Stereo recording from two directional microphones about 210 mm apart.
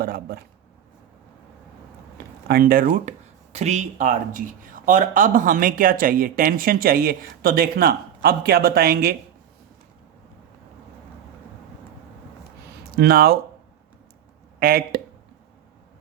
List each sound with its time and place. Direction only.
0.0 s speech: 45° right (ahead or behind)
2.5 s speech: 45° right (ahead or behind)
13.0 s speech: 45° right (ahead or behind)
14.6 s speech: 45° right (ahead or behind)